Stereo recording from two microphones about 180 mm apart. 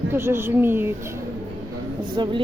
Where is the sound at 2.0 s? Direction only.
25° right (ahead or behind).